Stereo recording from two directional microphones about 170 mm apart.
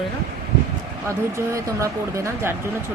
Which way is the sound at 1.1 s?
15° right (ahead or behind).